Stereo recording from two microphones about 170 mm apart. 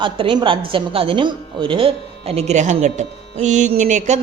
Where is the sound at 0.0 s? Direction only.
30° right (ahead or behind).